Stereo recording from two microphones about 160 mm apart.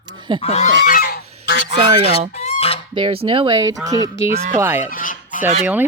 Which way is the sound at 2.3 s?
40° left (ahead or behind).